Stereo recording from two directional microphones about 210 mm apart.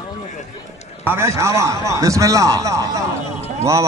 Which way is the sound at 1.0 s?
10° right (ahead or behind).